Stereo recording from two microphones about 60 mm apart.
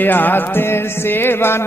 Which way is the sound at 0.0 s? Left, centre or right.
Left.